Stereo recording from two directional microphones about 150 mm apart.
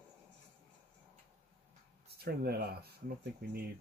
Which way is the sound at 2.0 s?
90° right.